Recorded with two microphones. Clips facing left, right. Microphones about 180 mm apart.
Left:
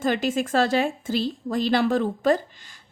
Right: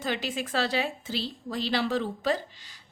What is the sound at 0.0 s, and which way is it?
A woman's voice, 50° left (ahead or behind).